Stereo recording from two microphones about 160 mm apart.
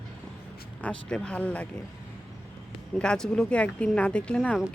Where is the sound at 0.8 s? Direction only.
5° left (ahead or behind).